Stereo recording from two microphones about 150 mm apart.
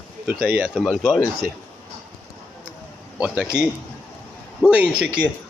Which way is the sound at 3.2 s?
5° right (ahead or behind).